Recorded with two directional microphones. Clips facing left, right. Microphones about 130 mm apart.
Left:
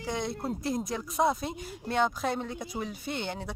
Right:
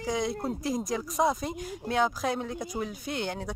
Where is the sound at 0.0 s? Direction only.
Centre (ahead or behind).